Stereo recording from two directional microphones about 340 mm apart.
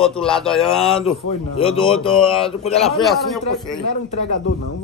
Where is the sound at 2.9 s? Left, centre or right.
Centre.